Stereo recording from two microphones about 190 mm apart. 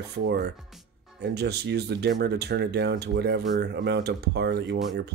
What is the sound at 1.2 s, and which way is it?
Speech, 60° right (ahead or behind).